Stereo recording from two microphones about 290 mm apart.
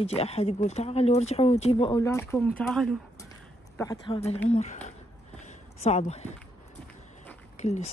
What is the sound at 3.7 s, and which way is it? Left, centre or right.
Speech, centre.